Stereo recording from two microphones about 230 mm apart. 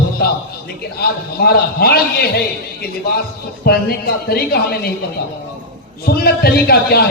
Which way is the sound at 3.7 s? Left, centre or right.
Left.